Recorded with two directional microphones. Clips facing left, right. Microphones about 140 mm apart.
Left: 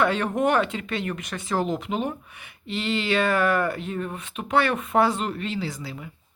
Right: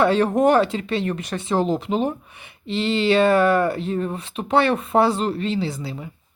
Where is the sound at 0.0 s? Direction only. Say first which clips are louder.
Right 6 dB; 35° right (ahead or behind).